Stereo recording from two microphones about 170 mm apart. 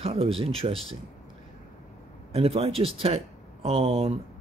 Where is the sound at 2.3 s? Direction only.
35° right (ahead or behind).